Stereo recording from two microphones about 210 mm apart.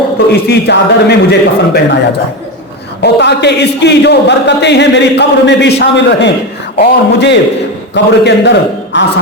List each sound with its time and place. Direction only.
0.3 s a man's voice: 50° left (ahead or behind)
3.0 s a man's voice: 55° left (ahead or behind)